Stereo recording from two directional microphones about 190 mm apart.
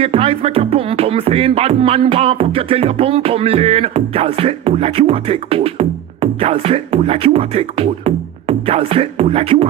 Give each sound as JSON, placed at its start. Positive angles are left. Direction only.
{"t": 0.0, "sound": "music", "side_deg": -30}